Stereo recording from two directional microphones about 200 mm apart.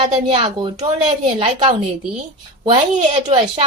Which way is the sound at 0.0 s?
25° right (ahead or behind).